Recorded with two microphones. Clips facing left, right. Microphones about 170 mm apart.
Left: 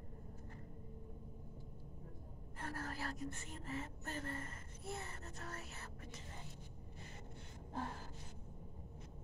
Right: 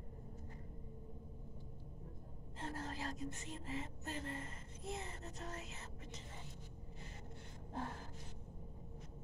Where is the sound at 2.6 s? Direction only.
20° right (ahead or behind).